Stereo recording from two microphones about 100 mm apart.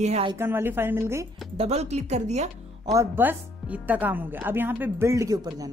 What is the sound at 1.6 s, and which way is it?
Speech, 90° right.